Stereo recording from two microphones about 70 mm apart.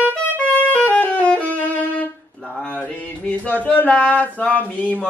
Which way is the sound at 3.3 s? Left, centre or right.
Left.